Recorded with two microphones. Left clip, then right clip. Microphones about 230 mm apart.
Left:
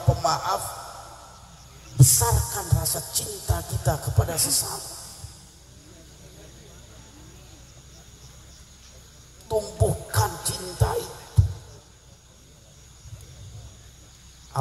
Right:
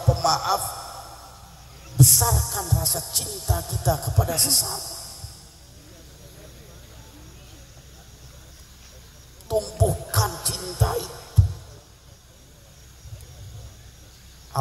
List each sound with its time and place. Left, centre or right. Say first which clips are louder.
0.0 s a sound: right 2 dB; right
2.0 s music: right 2 dB; right
9.5 s heart sounds: right 1 dB; right